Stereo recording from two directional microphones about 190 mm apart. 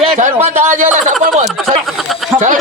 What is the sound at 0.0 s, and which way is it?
A man's voice, 40° right (ahead or behind).